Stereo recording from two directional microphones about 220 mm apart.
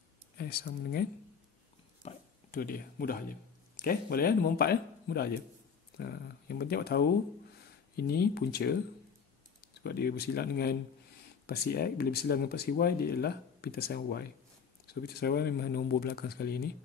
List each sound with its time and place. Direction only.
0.4 s speech: 45° left (ahead or behind)
2.0 s speech: 40° left (ahead or behind)